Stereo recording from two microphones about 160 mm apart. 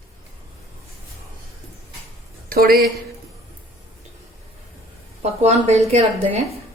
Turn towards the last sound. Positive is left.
turn(degrees=-45)  # may be behind; listen again after turning